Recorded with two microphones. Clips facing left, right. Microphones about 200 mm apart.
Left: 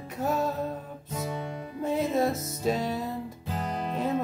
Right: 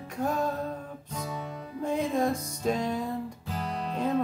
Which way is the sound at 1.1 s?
25° left (ahead or behind).